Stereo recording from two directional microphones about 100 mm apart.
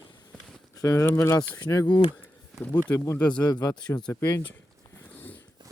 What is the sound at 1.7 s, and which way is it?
Speech, 40° left (ahead or behind).